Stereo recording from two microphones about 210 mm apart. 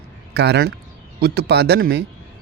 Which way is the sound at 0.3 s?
50° right (ahead or behind).